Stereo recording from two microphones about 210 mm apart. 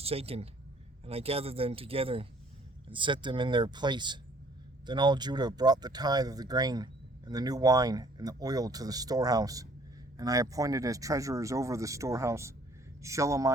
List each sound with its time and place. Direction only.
0.0 s speech: 30° right (ahead or behind)